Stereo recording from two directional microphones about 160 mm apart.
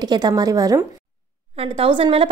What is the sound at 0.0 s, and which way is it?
Speech, 25° right (ahead or behind).